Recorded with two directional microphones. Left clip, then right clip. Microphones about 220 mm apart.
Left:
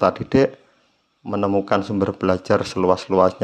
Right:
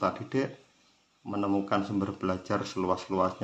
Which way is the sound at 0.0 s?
40° left (ahead or behind).